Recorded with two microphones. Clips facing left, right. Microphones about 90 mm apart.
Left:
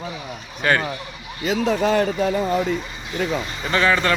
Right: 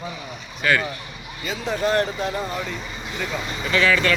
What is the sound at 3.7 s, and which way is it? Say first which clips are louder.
Speech: left 1 dB; 35° left (ahead or behind).